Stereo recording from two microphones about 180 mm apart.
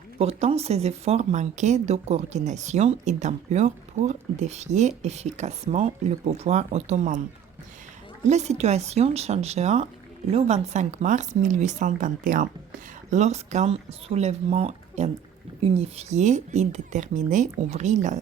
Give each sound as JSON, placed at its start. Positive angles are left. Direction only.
{"t": 0.2, "sound": "speech", "side_deg": -35}
{"t": 8.3, "sound": "speech", "side_deg": -40}